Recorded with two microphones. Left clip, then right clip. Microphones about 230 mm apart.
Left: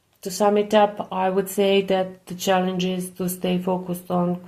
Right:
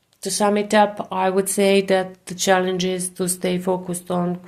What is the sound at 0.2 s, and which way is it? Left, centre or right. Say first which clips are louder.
Speech: even; right.